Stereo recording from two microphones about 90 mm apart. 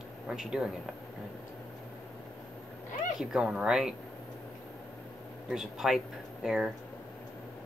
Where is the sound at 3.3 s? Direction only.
10° right (ahead or behind).